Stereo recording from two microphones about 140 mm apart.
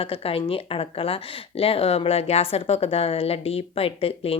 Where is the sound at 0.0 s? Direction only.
40° left (ahead or behind).